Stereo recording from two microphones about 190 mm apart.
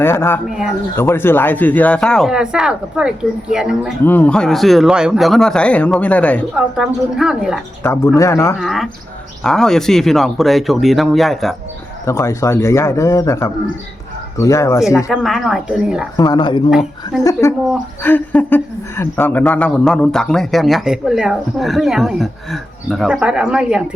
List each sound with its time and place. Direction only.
0.0 s a man's voice: 10° left (ahead or behind)
0.4 s a woman's voice: centre (ahead or behind)
0.9 s a woman's voice: 10° left (ahead or behind); by 3.9 s 5° right (ahead or behind)
4.0 s a woman's voice: 10° left (ahead or behind)
6.6 s a woman's voice: 5° right (ahead or behind)
7.9 s a man's voice: 15° left (ahead or behind)
8.5 s a woman's voice: centre (ahead or behind)
12.0 s a man's voice: 15° left (ahead or behind)
15.1 s a woman's voice: centre (ahead or behind)
16.1 s speech: 20° left (ahead or behind)
16.6 s a woman's voice: centre (ahead or behind)
18.0 s a woman's voice: 10° left (ahead or behind)